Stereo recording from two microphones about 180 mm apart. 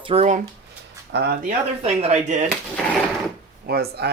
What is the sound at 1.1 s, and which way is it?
Speech, 65° right (ahead or behind).